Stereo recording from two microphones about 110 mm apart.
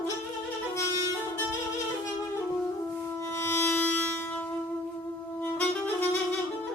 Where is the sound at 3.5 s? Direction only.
20° left (ahead or behind).